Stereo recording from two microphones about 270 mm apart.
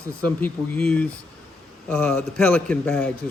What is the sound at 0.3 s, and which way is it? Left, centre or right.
A man's voice, centre.